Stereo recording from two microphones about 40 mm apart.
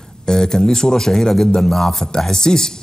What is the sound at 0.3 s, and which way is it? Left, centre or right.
A man's voice, centre.